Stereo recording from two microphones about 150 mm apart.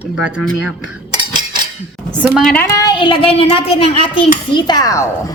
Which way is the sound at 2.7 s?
30° left (ahead or behind).